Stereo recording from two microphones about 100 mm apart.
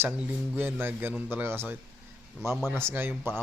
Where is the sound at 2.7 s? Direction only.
25° right (ahead or behind).